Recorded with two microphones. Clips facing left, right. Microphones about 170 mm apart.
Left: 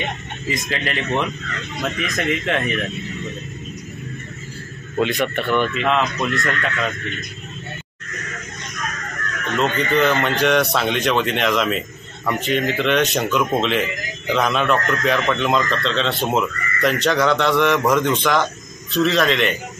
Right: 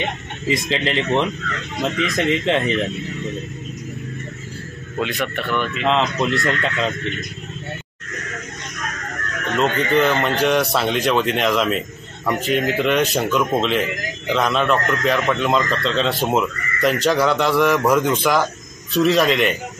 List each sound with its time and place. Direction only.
0.5 s speech: 25° right (ahead or behind)
5.0 s speech: centre (ahead or behind)
5.9 s speech: 25° right (ahead or behind)
9.6 s speech: 5° right (ahead or behind)